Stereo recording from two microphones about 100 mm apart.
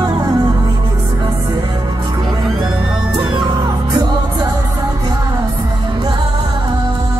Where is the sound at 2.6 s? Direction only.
5° right (ahead or behind).